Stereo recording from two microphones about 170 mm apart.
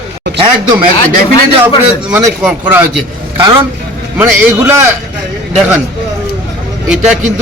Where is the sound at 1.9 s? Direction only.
5° right (ahead or behind).